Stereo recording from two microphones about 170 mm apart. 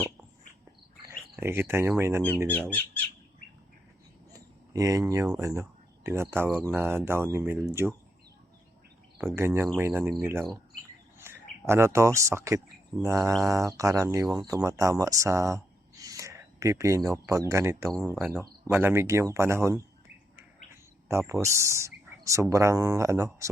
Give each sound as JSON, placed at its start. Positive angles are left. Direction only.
{"t": 1.4, "sound": "speech", "side_deg": -15}
{"t": 2.5, "sound": "speech", "side_deg": 10}
{"t": 4.3, "sound": "a sound", "side_deg": -20}
{"t": 5.4, "sound": "speech", "side_deg": -15}
{"t": 9.1, "sound": "speech", "side_deg": -15}
{"t": 21.1, "sound": "speech", "side_deg": -15}